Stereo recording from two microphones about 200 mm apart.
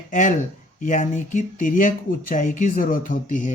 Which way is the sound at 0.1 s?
40° left (ahead or behind).